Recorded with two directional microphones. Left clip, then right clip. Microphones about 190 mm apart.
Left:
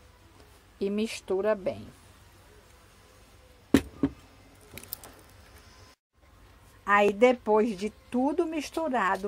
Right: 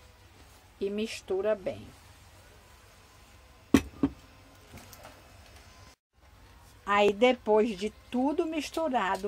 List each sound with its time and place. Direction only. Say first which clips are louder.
0.7 s speech: left 2 dB; 20° left (ahead or behind)
6.8 s a woman's voice: left 2 dB; 5° left (ahead or behind)